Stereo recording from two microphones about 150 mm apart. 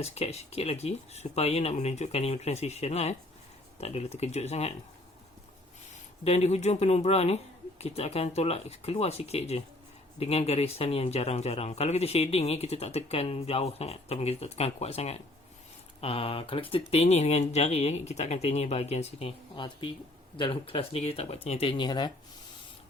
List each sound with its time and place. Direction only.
0.0 s speech: 45° left (ahead or behind)
6.2 s speech: 45° left (ahead or behind)
19.5 s speech: 30° left (ahead or behind)